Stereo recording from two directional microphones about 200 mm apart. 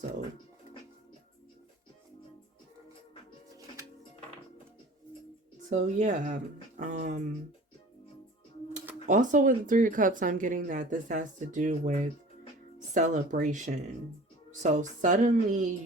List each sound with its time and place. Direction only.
5.6 s speech: 40° right (ahead or behind)
9.0 s speech: 40° right (ahead or behind)